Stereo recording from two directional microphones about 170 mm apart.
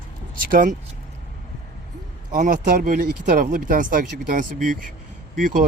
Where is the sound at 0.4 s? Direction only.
55° right (ahead or behind).